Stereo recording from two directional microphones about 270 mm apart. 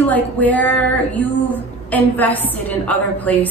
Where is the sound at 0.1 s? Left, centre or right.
Centre.